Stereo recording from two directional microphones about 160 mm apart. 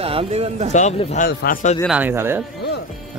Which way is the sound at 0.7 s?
50° left (ahead or behind).